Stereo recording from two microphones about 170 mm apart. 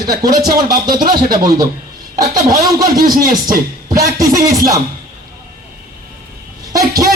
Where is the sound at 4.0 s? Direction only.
20° right (ahead or behind).